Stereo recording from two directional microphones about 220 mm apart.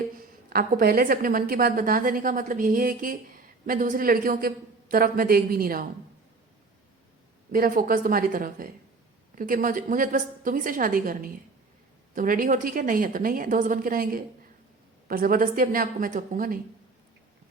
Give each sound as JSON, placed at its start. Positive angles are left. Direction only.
{"t": 0.2, "sound": "a woman's voice", "side_deg": -40}
{"t": 7.5, "sound": "a woman's voice", "side_deg": -40}